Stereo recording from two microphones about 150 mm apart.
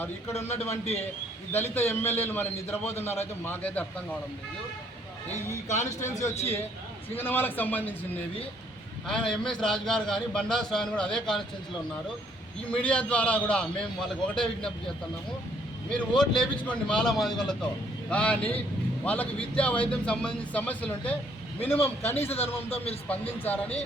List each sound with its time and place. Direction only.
0.5 s a man's voice: 45° left (ahead or behind)
1.5 s speech: 15° left (ahead or behind)
5.7 s a man's voice: 20° left (ahead or behind)
12.7 s speech: 10° left (ahead or behind)
15.9 s a man's voice: 5° left (ahead or behind)
22.7 s a man's voice: 40° left (ahead or behind)
23.0 s speech: 10° left (ahead or behind)